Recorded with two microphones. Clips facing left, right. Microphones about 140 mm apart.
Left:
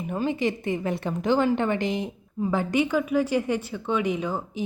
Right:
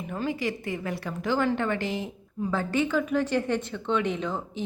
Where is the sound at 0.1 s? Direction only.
20° left (ahead or behind).